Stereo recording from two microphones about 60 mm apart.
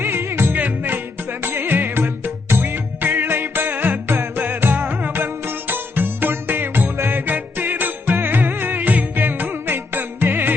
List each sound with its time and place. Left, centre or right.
0.0 s music: right